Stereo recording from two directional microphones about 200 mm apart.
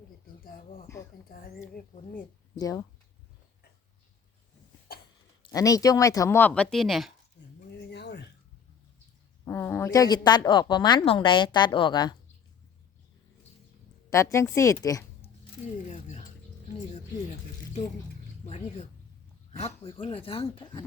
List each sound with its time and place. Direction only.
1.3 s speech: 45° left (ahead or behind)
2.6 s speech: 20° left (ahead or behind)
5.4 s speech: 15° left (ahead or behind); by 7.1 s centre (ahead or behind)
7.8 s a sound: 55° left (ahead or behind)
9.4 s a woman's voice: 10° left (ahead or behind)
14.1 s speech: 15° left (ahead or behind)
15.9 s music: 35° left (ahead or behind)
18.4 s a sound: 35° left (ahead or behind)
19.5 s a woman's voice: 30° left (ahead or behind)